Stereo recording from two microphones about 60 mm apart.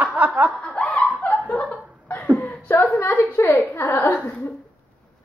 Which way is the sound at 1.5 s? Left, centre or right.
Left.